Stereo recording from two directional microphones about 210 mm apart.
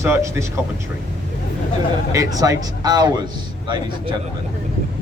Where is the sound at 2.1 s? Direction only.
15° right (ahead or behind).